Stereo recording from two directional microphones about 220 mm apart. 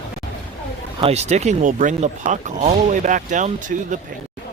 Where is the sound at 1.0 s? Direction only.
30° right (ahead or behind).